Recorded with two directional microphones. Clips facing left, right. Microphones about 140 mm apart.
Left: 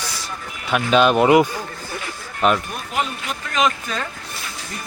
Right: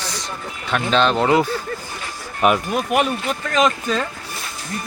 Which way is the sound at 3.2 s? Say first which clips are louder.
Right 3 dB; 40° right (ahead or behind).